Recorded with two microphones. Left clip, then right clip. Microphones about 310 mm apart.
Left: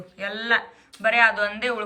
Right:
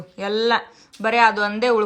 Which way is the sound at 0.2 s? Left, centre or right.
Centre.